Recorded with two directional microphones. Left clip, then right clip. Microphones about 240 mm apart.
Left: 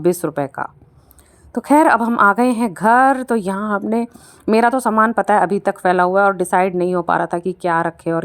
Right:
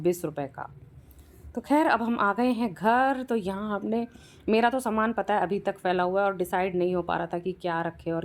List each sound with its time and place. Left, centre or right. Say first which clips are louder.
0.0 s a woman's voice: left 10 dB; left